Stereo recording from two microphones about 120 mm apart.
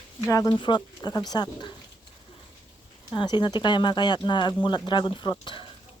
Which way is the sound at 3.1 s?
40° left (ahead or behind).